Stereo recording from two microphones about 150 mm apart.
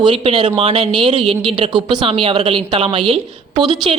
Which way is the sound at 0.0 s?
40° right (ahead or behind).